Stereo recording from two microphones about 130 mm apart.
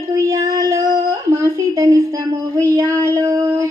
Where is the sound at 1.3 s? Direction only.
20° right (ahead or behind).